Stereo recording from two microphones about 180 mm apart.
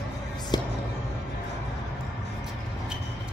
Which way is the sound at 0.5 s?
25° left (ahead or behind).